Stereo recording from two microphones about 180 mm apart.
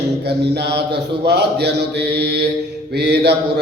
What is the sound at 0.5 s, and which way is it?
Mantra, 65° right (ahead or behind).